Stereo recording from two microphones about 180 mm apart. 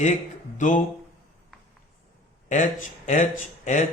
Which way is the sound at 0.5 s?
45° left (ahead or behind).